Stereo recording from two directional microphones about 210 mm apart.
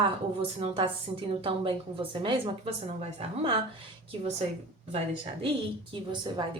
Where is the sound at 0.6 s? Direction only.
25° right (ahead or behind).